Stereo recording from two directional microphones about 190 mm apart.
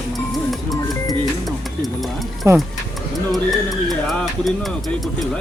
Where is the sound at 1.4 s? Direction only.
Centre (ahead or behind).